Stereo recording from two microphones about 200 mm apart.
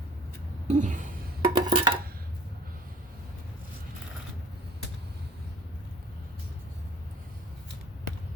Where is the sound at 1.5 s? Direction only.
25° right (ahead or behind).